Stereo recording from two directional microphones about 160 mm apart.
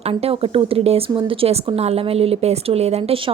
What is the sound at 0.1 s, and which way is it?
A woman's voice, 35° right (ahead or behind).